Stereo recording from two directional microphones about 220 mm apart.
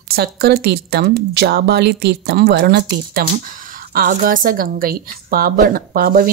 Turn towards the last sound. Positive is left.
turn(degrees=-40)  # may be behind; listen again after turning